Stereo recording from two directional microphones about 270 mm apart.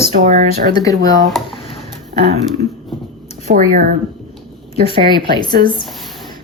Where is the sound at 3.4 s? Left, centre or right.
Right.